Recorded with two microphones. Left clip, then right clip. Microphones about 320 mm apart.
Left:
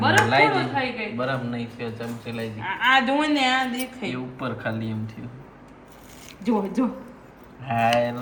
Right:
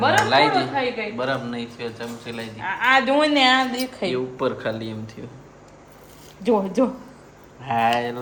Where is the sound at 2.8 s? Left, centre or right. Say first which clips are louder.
Right 2 dB; right.